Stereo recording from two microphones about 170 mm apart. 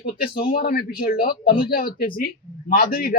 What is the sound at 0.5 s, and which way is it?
Speech, 60° left (ahead or behind).